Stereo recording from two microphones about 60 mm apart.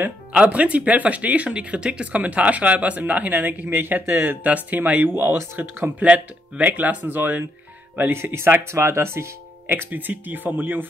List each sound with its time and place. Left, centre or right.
0.3 s speech: right
5.1 s speech: right
5.9 s speech: right
8.0 s speech: right
9.7 s speech: right